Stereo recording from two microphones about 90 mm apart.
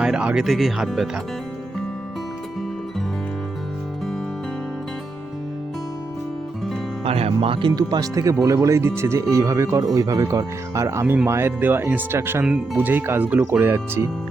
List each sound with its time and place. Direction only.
0.0 s speech: 10° right (ahead or behind)
7.0 s music: 90° right
7.4 s speech: 85° right
7.8 s speech: 45° right (ahead or behind); by 14.1 s 30° right (ahead or behind)